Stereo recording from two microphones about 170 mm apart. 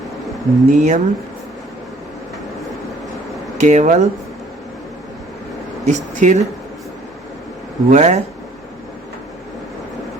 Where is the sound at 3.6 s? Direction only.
45° right (ahead or behind).